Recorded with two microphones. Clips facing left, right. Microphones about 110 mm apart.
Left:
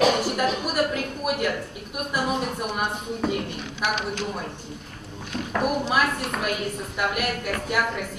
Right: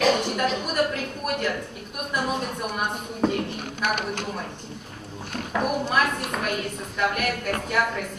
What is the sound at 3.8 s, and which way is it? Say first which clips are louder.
Speech: even; 50° right (ahead or behind).